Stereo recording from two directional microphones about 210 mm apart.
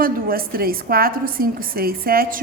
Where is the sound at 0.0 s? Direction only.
45° right (ahead or behind).